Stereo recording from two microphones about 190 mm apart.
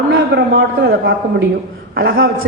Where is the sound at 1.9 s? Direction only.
55° right (ahead or behind).